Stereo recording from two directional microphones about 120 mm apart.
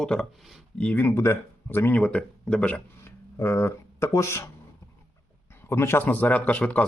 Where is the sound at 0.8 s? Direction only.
15° left (ahead or behind).